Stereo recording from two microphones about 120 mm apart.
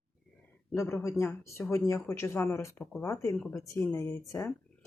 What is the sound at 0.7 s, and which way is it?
Speech, 20° left (ahead or behind).